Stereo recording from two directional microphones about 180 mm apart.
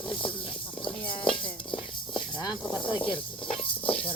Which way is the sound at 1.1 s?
30° left (ahead or behind).